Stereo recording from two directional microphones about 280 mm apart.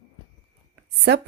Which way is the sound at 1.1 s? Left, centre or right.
Right.